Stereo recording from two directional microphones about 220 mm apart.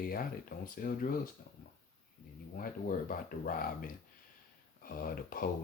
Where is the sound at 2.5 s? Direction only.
40° left (ahead or behind).